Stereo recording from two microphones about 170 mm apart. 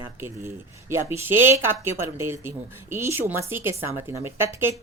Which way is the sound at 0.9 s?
15° right (ahead or behind).